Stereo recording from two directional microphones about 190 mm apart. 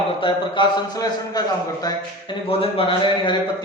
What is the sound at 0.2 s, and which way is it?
A man's voice, 25° left (ahead or behind).